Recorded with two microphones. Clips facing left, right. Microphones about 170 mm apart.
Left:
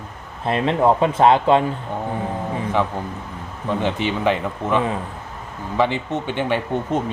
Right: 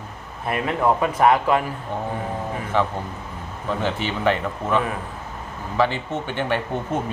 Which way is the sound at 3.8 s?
15° left (ahead or behind).